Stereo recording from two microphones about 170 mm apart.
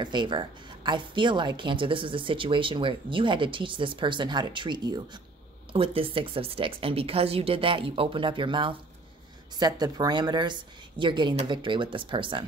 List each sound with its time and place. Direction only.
0.0 s a woman's voice: 25° right (ahead or behind)